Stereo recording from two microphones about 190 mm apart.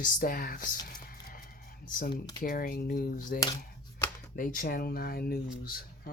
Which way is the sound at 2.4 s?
45° left (ahead or behind).